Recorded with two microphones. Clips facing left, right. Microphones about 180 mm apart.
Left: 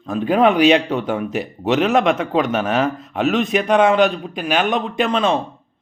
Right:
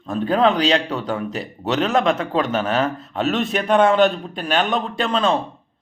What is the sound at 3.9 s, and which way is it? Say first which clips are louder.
Speech: even; 15° left (ahead or behind).